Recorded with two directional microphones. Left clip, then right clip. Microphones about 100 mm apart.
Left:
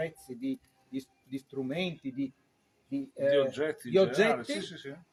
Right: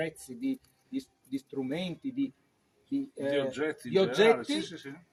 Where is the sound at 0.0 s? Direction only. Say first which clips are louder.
Right 1 dB; 30° left (ahead or behind).